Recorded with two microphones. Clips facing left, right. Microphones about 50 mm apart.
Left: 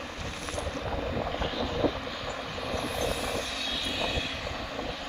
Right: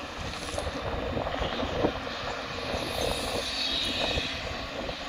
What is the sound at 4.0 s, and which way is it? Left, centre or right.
Vehicle, centre.